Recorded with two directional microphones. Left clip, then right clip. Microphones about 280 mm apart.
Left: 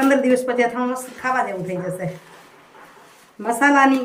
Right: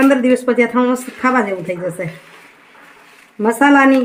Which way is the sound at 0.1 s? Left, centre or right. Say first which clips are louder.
Right 4 dB; right.